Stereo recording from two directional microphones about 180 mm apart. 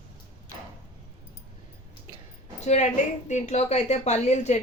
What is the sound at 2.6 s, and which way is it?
A woman's voice, 40° left (ahead or behind).